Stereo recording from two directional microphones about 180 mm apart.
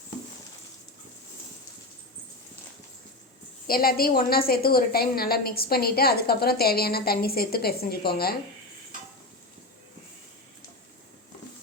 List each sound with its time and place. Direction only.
3.7 s a woman's voice: 55° left (ahead or behind)